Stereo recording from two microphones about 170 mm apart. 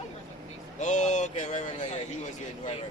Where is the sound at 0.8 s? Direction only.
45° left (ahead or behind).